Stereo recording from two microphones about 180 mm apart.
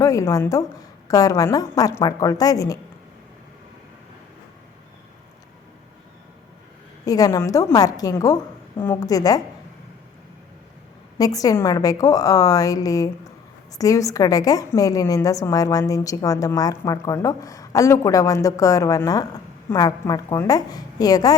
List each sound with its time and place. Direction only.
0.0 s a woman's voice: 20° left (ahead or behind)
7.0 s a woman's voice: 20° left (ahead or behind)
11.2 s a woman's voice: 20° left (ahead or behind)